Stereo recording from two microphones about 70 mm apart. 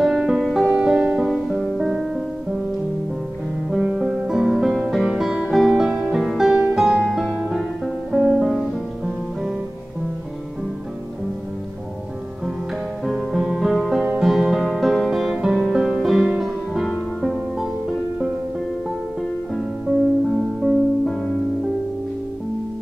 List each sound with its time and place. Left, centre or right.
0.0 s music: centre
0.7 s music: centre
1.2 s music: centre
3.8 s music: centre
13.0 s music: centre
20.2 s music: centre